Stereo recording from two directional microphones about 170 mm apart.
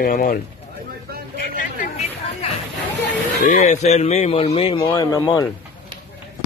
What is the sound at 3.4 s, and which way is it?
Speech, 50° left (ahead or behind).